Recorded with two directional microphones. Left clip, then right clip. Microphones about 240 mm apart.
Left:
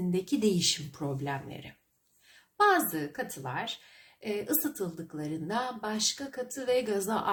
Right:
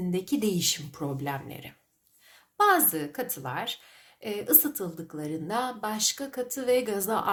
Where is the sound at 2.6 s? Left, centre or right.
Centre.